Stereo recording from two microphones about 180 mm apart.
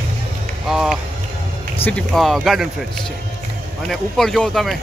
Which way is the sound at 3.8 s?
Centre (ahead or behind).